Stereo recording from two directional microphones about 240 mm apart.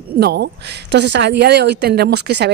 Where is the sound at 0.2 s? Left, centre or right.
Right.